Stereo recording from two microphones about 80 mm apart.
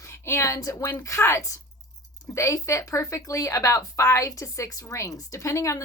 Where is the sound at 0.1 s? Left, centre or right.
Left.